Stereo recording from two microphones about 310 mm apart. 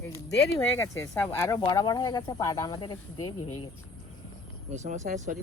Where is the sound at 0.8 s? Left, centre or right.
Centre.